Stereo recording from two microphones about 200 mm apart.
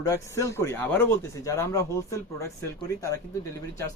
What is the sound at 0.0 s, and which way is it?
Speech, 15° left (ahead or behind).